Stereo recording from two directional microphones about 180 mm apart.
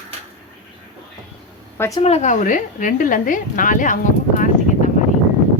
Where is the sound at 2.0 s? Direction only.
40° left (ahead or behind).